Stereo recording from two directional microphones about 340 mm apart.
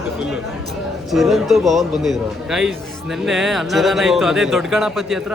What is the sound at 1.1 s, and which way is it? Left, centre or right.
A man's voice, centre.